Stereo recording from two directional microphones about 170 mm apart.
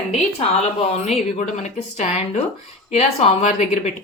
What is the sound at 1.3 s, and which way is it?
A woman's voice, 40° left (ahead or behind).